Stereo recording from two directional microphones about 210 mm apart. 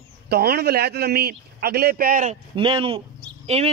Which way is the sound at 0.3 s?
50° right (ahead or behind).